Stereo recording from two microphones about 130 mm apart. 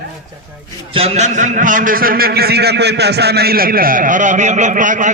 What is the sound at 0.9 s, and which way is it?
A man's voice, 55° right (ahead or behind).